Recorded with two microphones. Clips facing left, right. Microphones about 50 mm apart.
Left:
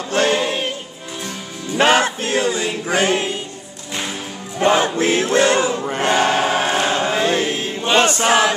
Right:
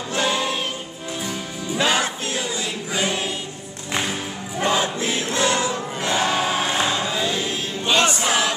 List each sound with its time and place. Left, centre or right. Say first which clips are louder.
0.1 s choir: left 6 dB; left
0.4 s choir: left 3 dB; left
1.8 s choir: left 7 dB; left
4.6 s choir: left 6 dB; left
5.9 s choir: left 5 dB; left
7.8 s choir: left 4 dB; left
8.2 s choir: left 6 dB; left